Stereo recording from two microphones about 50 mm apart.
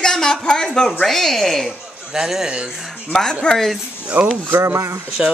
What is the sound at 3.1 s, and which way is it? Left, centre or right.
Speech, centre.